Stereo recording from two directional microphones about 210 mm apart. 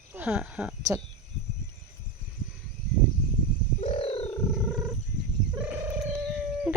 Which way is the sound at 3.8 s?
30° left (ahead or behind).